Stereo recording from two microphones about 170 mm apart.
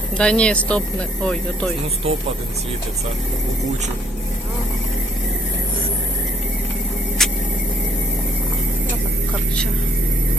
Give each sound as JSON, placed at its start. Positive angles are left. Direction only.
{"t": 0.2, "sound": "speech", "side_deg": 5}
{"t": 2.0, "sound": "speech", "side_deg": -35}
{"t": 7.2, "sound": "vehicle", "side_deg": 0}